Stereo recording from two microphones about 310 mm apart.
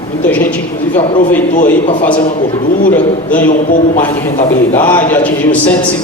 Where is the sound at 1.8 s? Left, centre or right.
Centre.